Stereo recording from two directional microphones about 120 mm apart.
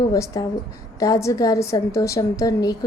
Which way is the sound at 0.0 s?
30° left (ahead or behind).